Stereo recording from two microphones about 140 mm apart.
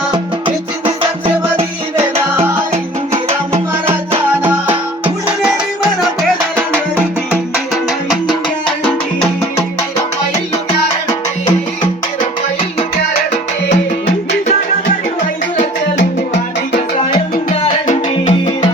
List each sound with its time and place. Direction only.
0.1 s music: 35° right (ahead or behind)
3.1 s music: 45° right (ahead or behind)
5.0 s music: 5° right (ahead or behind)
17.5 s music: 50° left (ahead or behind)